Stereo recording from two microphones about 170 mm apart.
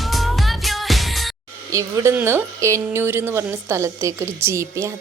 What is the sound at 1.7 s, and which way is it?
Speech, 15° right (ahead or behind).